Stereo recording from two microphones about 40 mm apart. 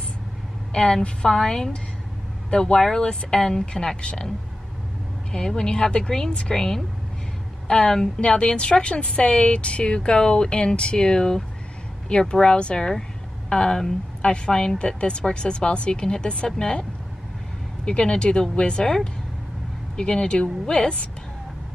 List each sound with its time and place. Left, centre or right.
0.7 s a woman's voice: centre
5.5 s a woman's voice: left
17.8 s a woman's voice: left
20.0 s a woman's voice: left